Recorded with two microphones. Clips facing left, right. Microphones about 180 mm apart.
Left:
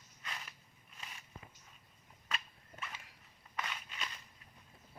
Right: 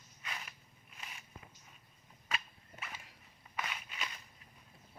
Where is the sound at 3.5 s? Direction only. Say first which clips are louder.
Right 1 dB; 5° right (ahead or behind).